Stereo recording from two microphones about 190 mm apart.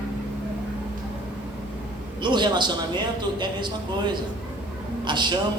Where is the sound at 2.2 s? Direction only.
25° right (ahead or behind).